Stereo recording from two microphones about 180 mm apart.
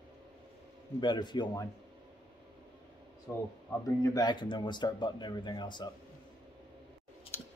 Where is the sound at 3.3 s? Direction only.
10° left (ahead or behind).